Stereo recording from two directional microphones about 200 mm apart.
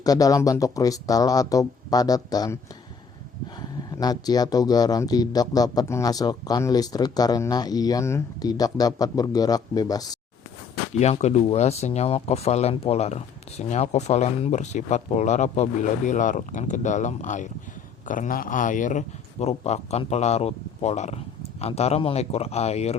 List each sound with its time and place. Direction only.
0.0 s speech: 20° left (ahead or behind)
3.9 s speech: 20° left (ahead or behind)
10.9 s speech: 35° left (ahead or behind)